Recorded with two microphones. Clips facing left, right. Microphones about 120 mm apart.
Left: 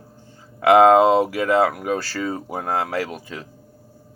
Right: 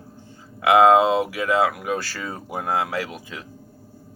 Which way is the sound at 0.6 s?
40° left (ahead or behind).